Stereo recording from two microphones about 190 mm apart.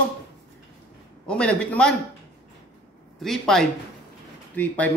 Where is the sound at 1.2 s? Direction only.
5° left (ahead or behind).